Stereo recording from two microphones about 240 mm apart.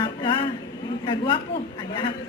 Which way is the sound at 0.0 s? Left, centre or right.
Centre.